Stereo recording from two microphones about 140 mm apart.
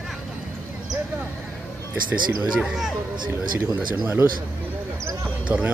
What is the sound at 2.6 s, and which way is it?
Speech, 5° right (ahead or behind).